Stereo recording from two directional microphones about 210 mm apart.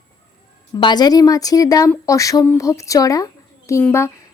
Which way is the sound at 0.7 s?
20° left (ahead or behind).